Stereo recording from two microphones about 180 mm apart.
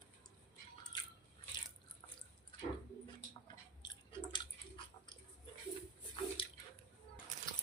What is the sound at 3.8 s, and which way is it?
Chewing, 25° left (ahead or behind).